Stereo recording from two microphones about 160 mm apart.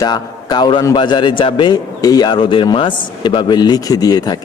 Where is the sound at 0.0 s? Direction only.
25° left (ahead or behind).